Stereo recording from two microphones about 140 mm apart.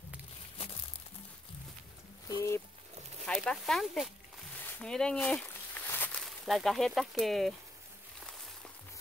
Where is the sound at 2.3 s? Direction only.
20° left (ahead or behind).